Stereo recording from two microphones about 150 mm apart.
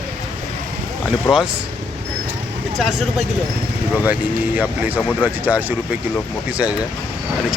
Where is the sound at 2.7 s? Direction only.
Centre (ahead or behind).